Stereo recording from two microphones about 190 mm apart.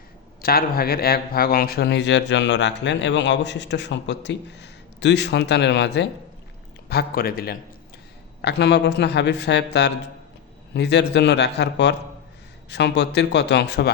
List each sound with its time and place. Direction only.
0.4 s speech: 50° left (ahead or behind)
6.8 s a man's voice: 55° left (ahead or behind)
8.4 s speech: 65° left (ahead or behind)